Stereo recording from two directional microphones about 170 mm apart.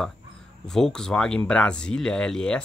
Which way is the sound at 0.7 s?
5° left (ahead or behind).